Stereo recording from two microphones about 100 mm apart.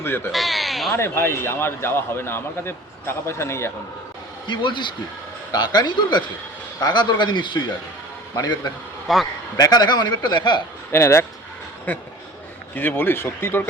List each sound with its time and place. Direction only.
0.0 s a man's voice: 20° left (ahead or behind)
0.3 s speech: centre (ahead or behind)
0.9 s a man's voice: 25° left (ahead or behind)
4.4 s a man's voice: 50° left (ahead or behind)
9.1 s speech: centre (ahead or behind)
9.6 s a man's voice: 45° left (ahead or behind)
10.9 s a man's voice: 25° left (ahead or behind)